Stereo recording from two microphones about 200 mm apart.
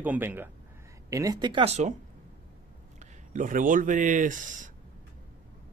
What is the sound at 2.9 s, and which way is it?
Speech, 40° right (ahead or behind).